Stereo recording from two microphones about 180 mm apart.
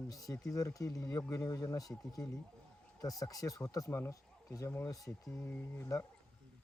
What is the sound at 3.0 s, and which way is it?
Speech, 20° left (ahead or behind).